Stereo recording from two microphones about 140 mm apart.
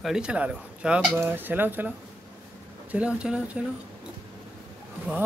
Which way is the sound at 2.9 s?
10° right (ahead or behind).